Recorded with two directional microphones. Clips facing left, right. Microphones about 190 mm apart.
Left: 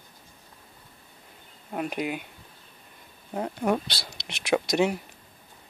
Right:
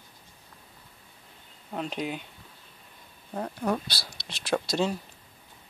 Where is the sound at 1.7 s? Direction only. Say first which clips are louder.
Left 2 dB; 10° left (ahead or behind).